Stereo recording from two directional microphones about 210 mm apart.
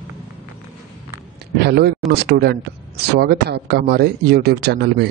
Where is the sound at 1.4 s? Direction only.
50° right (ahead or behind).